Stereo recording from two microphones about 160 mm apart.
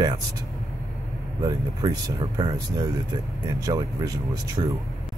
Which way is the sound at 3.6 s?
25° right (ahead or behind).